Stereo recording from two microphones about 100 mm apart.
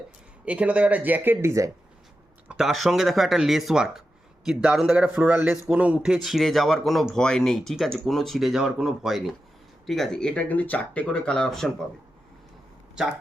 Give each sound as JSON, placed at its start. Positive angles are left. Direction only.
{"t": 0.4, "sound": "speech", "side_deg": -15}
{"t": 2.5, "sound": "a man's voice", "side_deg": 0}